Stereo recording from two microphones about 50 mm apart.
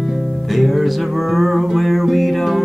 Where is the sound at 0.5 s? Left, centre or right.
Centre.